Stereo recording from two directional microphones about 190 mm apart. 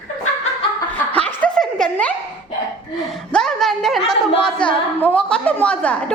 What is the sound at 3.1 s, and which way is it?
A woman's voice, centre (ahead or behind).